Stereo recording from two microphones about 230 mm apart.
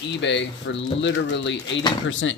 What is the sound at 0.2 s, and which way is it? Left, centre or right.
Speech, left.